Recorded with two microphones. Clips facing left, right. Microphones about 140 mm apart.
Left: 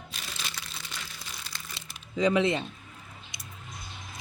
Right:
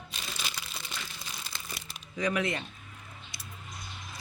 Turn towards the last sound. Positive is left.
turn(degrees=20)  # may be behind; listen again after turning